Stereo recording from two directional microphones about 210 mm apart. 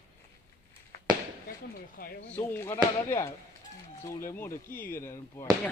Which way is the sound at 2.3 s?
10° left (ahead or behind).